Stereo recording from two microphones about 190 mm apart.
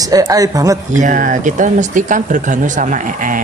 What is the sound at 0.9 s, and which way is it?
Speech, 40° right (ahead or behind).